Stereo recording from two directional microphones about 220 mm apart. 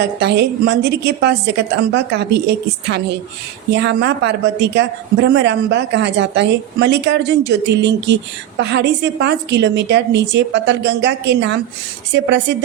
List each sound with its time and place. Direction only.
0.0 s speech: 50° right (ahead or behind)